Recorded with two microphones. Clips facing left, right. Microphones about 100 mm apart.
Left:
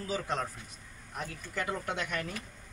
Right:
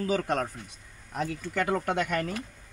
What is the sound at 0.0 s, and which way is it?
Speech, 55° right (ahead or behind).